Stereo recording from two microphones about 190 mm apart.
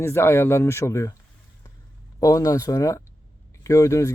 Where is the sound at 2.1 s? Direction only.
15° left (ahead or behind).